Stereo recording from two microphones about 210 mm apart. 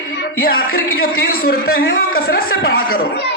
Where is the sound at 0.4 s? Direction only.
45° left (ahead or behind).